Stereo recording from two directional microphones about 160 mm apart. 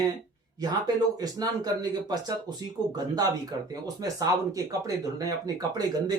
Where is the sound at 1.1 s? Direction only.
25° right (ahead or behind).